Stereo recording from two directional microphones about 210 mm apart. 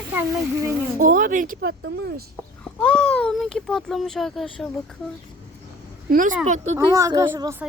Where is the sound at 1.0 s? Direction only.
40° right (ahead or behind).